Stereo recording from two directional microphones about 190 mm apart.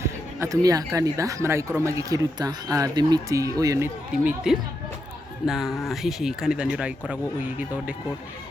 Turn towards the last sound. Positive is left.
turn(degrees=-10)  # may be behind; listen again after turning